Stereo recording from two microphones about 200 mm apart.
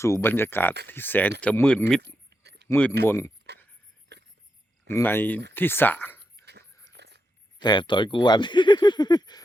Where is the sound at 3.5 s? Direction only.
55° right (ahead or behind).